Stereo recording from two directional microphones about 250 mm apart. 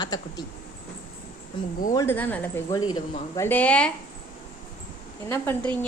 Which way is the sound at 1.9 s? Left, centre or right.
Centre.